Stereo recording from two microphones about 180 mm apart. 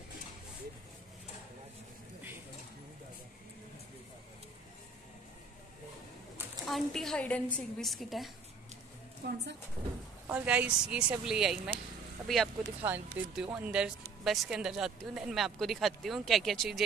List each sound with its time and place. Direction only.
6.6 s speech: centre (ahead or behind)
9.2 s a woman's voice: 70° right (ahead or behind)
10.2 s speech: 5° right (ahead or behind)
12.8 s speech: 5° right (ahead or behind)